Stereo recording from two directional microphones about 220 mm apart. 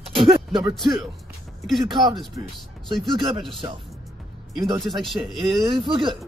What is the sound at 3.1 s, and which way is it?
Speech, 20° right (ahead or behind).